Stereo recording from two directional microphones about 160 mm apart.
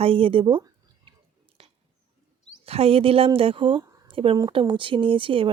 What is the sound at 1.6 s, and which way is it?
Squish, 35° right (ahead or behind).